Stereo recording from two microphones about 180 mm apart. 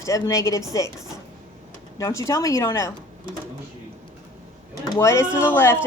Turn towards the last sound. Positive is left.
turn(degrees=15)  # may be behind; listen again after turning